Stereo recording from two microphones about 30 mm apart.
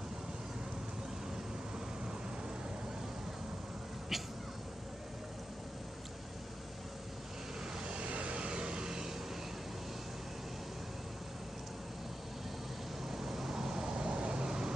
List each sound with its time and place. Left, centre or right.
4.1 s cat: centre
7.8 s vehicle: right
13.1 s vehicle: centre